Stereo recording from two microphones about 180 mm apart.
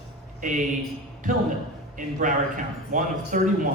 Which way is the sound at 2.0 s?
45° right (ahead or behind).